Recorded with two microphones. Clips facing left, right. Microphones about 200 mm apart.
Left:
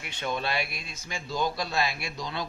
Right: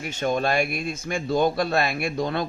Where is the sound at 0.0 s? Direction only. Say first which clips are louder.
Right 8 dB; 45° right (ahead or behind).